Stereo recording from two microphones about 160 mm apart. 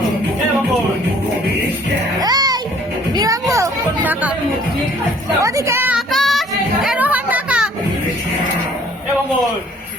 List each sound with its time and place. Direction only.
2.2 s music: 25° right (ahead or behind)
3.5 s children playing: 15° right (ahead or behind)
5.4 s music: 20° right (ahead or behind)
6.1 s child singing: centre (ahead or behind)
6.8 s a sound: 10° right (ahead or behind)